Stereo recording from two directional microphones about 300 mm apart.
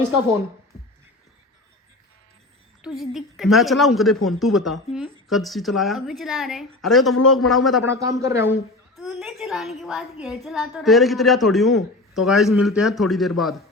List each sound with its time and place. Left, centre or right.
2.8 s a woman's voice: centre
7.9 s a woman's voice: centre